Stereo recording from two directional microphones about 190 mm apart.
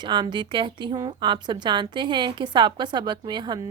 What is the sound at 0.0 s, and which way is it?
A woman's voice, 25° right (ahead or behind).